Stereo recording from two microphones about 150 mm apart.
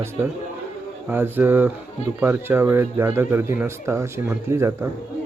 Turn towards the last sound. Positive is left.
turn(degrees=-20)  # may be behind; listen again after turning